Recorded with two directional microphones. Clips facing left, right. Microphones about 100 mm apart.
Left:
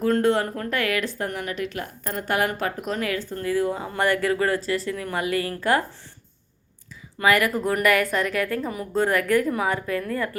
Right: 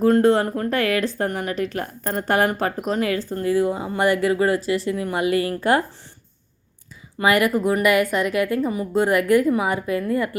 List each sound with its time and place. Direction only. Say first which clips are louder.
0.0 s speech: right 4 dB; 30° right (ahead or behind)
7.2 s speech: right 2 dB; 20° right (ahead or behind)
7.5 s speech: right 3 dB; 10° right (ahead or behind)